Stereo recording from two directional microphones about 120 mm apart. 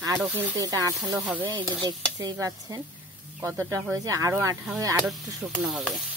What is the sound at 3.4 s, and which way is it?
Speech, 20° right (ahead or behind).